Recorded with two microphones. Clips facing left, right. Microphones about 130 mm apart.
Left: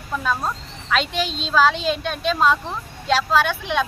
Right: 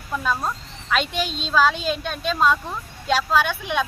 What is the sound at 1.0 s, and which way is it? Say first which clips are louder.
Speech: left 1 dB; 45° right (ahead or behind).